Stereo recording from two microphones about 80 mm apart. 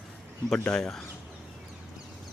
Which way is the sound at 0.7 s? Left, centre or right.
Centre.